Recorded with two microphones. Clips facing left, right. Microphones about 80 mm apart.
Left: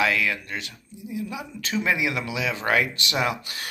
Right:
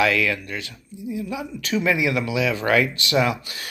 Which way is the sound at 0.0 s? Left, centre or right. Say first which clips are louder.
Right 3 dB; left.